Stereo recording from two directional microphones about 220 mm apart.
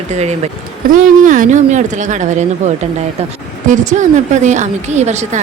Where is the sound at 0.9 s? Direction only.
35° right (ahead or behind).